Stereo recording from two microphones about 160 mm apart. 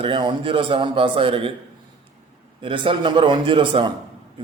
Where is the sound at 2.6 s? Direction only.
30° right (ahead or behind).